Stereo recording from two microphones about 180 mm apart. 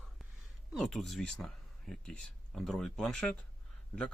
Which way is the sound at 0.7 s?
Centre (ahead or behind).